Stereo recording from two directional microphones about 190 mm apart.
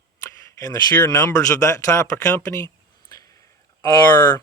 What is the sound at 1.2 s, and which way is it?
Speech, 15° left (ahead or behind).